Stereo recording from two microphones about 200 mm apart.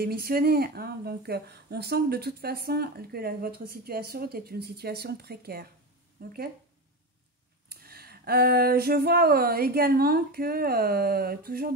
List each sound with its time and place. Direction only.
0.0 s speech: 50° right (ahead or behind)
7.7 s speech: 50° right (ahead or behind)